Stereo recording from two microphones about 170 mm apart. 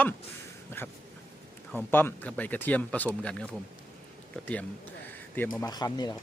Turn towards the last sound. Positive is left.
turn(degrees=25)  # may be behind; listen again after turning